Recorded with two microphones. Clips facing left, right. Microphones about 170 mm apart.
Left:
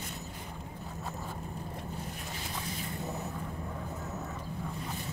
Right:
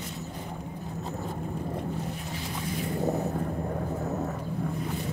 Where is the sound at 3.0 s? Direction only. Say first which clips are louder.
Right 12 dB; 55° right (ahead or behind).